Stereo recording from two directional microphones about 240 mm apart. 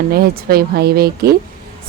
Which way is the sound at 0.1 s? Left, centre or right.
Right.